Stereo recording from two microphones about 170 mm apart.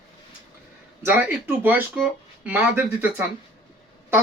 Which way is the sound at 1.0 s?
10° right (ahead or behind).